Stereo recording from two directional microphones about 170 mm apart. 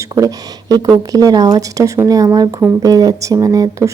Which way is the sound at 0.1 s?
20° right (ahead or behind).